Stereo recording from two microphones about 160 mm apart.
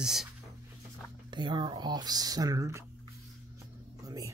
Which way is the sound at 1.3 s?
30° right (ahead or behind).